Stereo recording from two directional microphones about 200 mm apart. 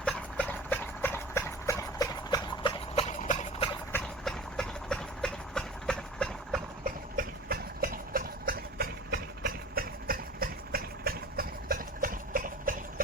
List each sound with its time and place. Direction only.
0.0 s horse: 5° left (ahead or behind); by 3.7 s 35° left (ahead or behind)
3.9 s a sound: centre (ahead or behind)
7.2 s engine: 45° right (ahead or behind)